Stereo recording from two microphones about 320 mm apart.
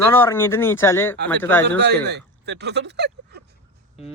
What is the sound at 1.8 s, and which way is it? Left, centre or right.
Speech, right.